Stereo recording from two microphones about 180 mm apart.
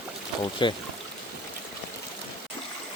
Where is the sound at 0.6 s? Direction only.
25° left (ahead or behind).